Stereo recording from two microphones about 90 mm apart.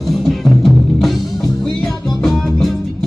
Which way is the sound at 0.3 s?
Centre (ahead or behind).